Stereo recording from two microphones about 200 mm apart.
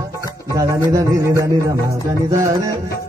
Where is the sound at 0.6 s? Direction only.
20° right (ahead or behind).